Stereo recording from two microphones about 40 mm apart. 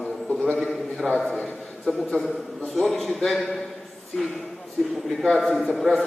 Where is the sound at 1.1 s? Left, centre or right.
Left.